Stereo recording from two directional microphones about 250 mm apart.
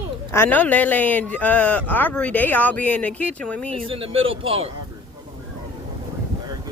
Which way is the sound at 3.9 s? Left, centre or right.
Right.